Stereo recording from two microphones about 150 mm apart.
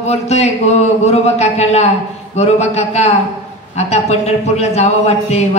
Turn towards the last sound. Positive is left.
turn(degrees=45)  # may be behind; listen again after turning